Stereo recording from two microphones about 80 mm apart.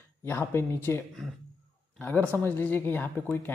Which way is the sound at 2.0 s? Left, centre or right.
Left.